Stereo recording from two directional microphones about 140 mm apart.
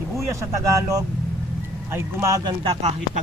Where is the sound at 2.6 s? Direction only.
40° right (ahead or behind).